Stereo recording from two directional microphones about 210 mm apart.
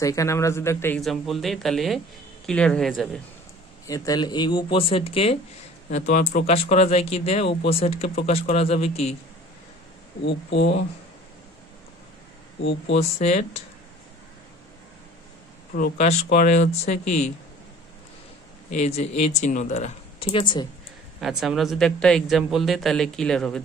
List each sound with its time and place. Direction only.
0.0 s a man's voice: 15° left (ahead or behind)
3.8 s speech: 15° left (ahead or behind)
10.2 s speech: 55° left (ahead or behind)
12.6 s speech: 60° left (ahead or behind)
13.2 s speech: 30° left (ahead or behind)
15.7 s speech: 35° left (ahead or behind)
18.8 s speech: 30° left (ahead or behind)
21.2 s a man's voice: centre (ahead or behind)